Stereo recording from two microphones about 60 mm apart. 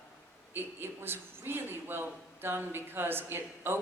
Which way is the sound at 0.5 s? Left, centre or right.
Right.